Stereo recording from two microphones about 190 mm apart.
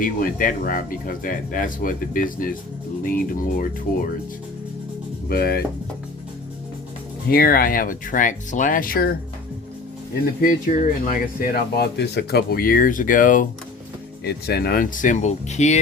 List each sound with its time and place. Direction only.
0.0 s speech: 45° left (ahead or behind)
5.3 s speech: 55° left (ahead or behind)
7.3 s speech: 50° left (ahead or behind)
10.4 s speech: 45° left (ahead or behind)